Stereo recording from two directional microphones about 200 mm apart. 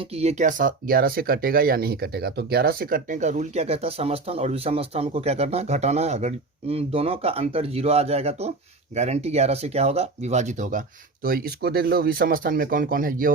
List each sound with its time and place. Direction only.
0.0 s speech: 30° right (ahead or behind)